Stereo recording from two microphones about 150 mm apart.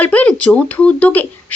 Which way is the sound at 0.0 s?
10° left (ahead or behind).